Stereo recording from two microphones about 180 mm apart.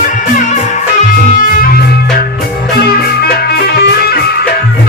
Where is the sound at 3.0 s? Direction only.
60° left (ahead or behind).